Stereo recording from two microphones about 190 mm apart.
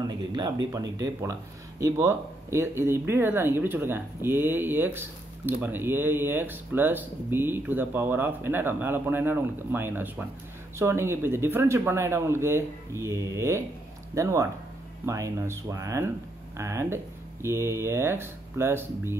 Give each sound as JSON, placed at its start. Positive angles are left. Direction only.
{"t": 0.0, "sound": "speech", "side_deg": -20}